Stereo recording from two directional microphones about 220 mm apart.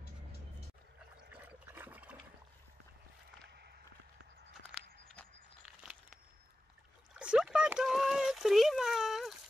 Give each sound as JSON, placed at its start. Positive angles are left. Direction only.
{"t": 1.3, "sound": "trickle", "side_deg": -10}
{"t": 3.4, "sound": "walk", "side_deg": -50}
{"t": 7.2, "sound": "a sound", "side_deg": -5}